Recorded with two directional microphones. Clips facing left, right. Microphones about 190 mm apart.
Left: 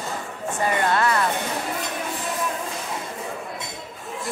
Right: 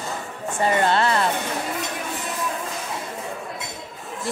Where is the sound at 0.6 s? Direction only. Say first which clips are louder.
Right 2 dB; 30° right (ahead or behind).